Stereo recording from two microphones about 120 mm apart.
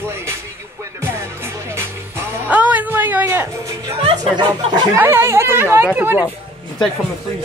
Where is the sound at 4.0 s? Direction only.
50° right (ahead or behind).